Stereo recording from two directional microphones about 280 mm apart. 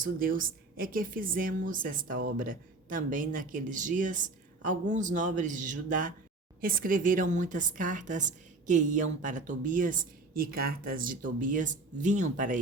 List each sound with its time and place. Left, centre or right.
0.0 s speech: right